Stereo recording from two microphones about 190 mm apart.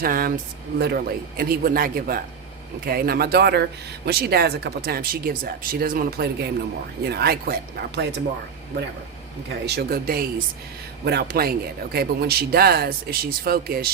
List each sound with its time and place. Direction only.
0.0 s speech: 50° right (ahead or behind)
9.6 s speech: 55° right (ahead or behind)